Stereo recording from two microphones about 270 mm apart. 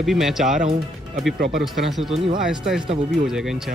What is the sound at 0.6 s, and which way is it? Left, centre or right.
Speech, right.